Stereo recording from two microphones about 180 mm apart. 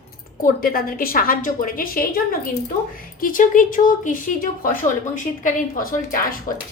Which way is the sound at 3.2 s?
50° left (ahead or behind).